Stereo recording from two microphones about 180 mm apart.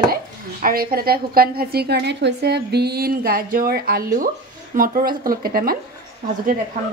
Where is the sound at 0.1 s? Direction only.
55° right (ahead or behind).